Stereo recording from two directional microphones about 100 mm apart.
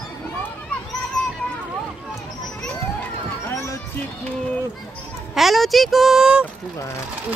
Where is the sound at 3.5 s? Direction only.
30° left (ahead or behind).